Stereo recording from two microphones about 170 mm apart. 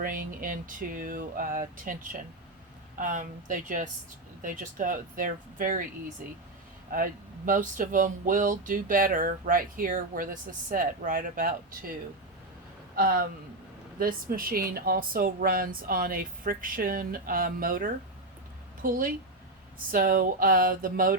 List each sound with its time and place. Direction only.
0.0 s speech: 55° right (ahead or behind)
3.0 s speech: 50° right (ahead or behind)
6.9 s speech: 55° right (ahead or behind)
13.0 s speech: 60° right (ahead or behind)